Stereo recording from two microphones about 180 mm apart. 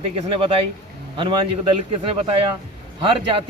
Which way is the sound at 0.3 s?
30° right (ahead or behind).